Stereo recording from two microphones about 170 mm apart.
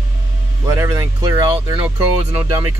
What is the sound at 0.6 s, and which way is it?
Speech, 20° right (ahead or behind).